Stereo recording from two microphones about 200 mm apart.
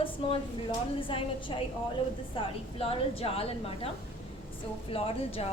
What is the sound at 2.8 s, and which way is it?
A woman's voice, 30° left (ahead or behind).